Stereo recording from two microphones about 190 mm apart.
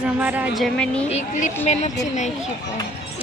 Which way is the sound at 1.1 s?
40° left (ahead or behind).